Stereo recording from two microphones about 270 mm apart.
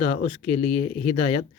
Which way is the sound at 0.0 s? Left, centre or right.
Left.